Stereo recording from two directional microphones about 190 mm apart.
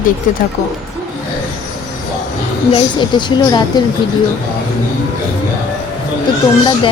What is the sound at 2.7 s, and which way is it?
A woman's voice, 25° left (ahead or behind).